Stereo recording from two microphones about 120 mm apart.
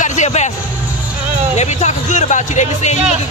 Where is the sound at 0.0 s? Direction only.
85° left.